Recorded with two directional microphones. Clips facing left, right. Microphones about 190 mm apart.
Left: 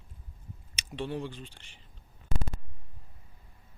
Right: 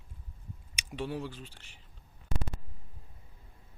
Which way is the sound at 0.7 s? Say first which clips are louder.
Left 1 dB; 10° right (ahead or behind).